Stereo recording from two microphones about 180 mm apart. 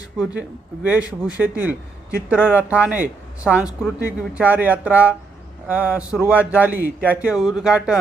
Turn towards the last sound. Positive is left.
turn(degrees=-5)  # may be behind; listen again after turning